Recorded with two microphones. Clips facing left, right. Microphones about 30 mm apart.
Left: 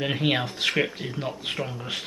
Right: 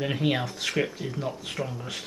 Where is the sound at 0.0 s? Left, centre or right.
Left.